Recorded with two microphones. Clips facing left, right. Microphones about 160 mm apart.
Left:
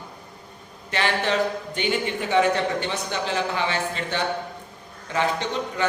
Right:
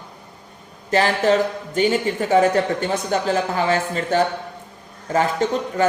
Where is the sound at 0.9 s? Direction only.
40° right (ahead or behind).